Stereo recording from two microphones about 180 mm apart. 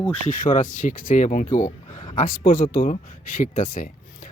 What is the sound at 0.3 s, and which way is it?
Speech, 50° left (ahead or behind).